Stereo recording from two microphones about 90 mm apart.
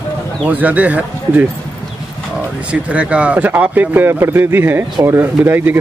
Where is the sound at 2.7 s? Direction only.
15° right (ahead or behind).